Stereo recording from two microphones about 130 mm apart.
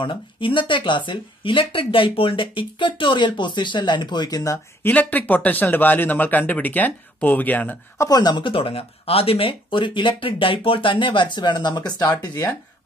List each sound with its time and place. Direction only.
0.0 s speech: 40° left (ahead or behind); by 4.9 s 25° left (ahead or behind)
4.9 s speech: 10° left (ahead or behind)
8.1 s speech: 35° left (ahead or behind)